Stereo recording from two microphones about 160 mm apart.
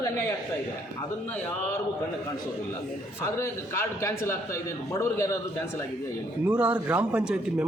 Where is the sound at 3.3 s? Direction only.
15° left (ahead or behind).